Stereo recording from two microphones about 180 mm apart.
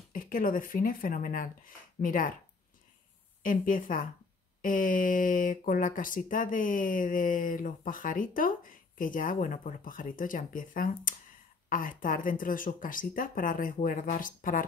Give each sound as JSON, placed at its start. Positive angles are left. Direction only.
{"t": 0.1, "sound": "speech", "side_deg": 50}
{"t": 3.4, "sound": "speech", "side_deg": 50}